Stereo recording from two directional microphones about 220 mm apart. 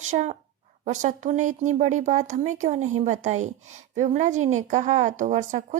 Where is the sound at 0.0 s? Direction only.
30° right (ahead or behind).